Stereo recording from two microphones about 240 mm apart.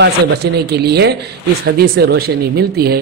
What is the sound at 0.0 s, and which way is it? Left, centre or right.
A man's voice, right.